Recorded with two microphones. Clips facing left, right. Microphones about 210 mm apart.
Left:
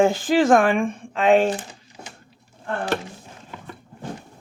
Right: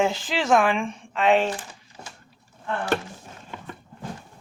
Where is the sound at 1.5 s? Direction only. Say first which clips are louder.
Left 5 dB; 15° left (ahead or behind).